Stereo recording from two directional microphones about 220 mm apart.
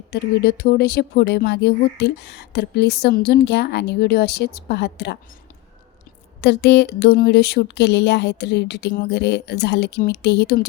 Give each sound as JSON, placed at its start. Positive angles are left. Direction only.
{"t": 0.1, "sound": "speech", "side_deg": 45}
{"t": 6.4, "sound": "speech", "side_deg": 50}